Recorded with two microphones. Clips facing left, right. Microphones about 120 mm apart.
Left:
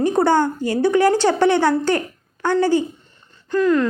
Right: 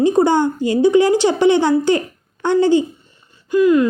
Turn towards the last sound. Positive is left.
turn(degrees=-10)  # may be behind; listen again after turning